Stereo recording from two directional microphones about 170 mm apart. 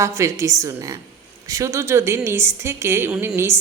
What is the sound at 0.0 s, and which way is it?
A man's voice, 15° right (ahead or behind).